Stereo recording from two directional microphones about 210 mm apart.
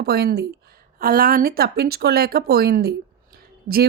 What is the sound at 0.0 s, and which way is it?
Speech, 50° right (ahead or behind).